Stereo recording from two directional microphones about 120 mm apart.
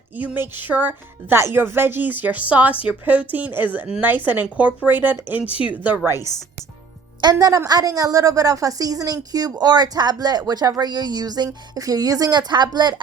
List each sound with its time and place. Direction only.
0.2 s speech: 15° right (ahead or behind)
7.2 s a woman's voice: 35° right (ahead or behind)